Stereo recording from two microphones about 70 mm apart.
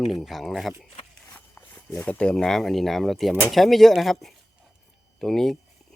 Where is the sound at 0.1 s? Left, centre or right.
Centre.